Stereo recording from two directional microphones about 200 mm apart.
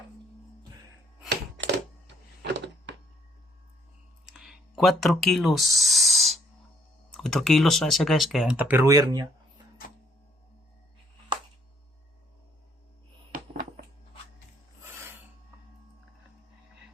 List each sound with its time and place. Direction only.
1.3 s typewriter: 60° right (ahead or behind)
4.3 s speech: centre (ahead or behind); by 9.2 s 15° right (ahead or behind)